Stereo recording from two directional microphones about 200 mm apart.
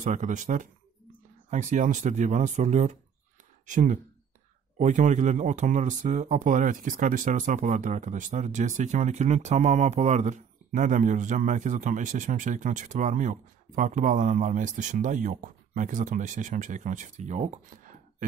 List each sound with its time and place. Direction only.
0.0 s speech: 40° right (ahead or behind)